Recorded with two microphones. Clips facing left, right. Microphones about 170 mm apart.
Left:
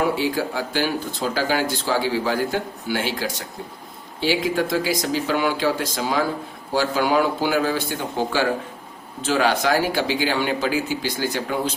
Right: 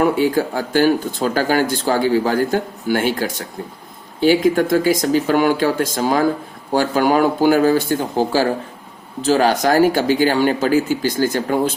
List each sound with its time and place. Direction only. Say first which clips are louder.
0.0 s speech: right 6 dB; 50° right (ahead or behind)